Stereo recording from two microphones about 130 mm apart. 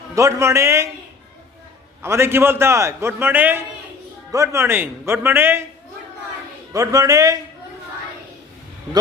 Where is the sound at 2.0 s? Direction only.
20° right (ahead or behind).